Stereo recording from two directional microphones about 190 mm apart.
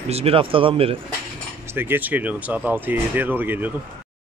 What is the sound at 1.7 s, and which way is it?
Speech, 10° right (ahead or behind).